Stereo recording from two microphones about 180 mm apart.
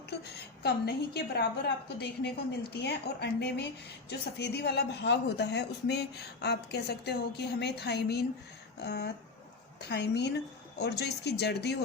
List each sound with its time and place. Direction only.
0.1 s speech: 65° left (ahead or behind)